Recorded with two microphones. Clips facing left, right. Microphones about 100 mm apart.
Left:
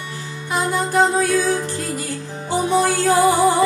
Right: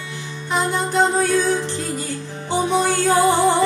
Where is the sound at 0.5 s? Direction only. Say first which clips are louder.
Left 1 dB; 5° left (ahead or behind).